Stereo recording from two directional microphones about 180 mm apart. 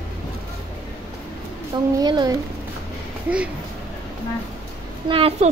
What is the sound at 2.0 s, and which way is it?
Speech, 25° right (ahead or behind).